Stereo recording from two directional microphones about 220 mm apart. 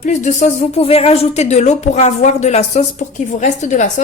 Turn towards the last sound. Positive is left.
turn(degrees=35)  # may be behind; listen again after turning